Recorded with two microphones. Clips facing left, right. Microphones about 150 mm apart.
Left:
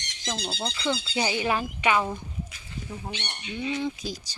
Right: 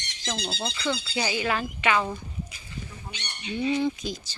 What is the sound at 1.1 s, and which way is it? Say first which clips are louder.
Speech: left 2 dB; 25° left (ahead or behind).